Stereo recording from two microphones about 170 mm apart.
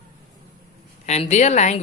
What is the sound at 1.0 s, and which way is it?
Speech, 40° left (ahead or behind).